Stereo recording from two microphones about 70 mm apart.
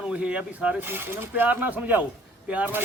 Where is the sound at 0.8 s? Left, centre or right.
Right.